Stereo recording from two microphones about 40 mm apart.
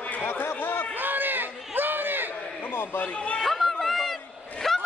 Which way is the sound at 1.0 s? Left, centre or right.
Right.